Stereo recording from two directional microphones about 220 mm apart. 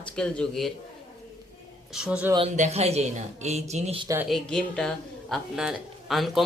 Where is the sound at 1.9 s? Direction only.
5° right (ahead or behind).